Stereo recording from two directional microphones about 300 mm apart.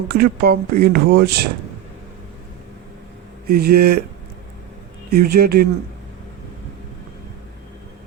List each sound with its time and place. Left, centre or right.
0.1 s speech: right
3.4 s speech: right
5.2 s speech: right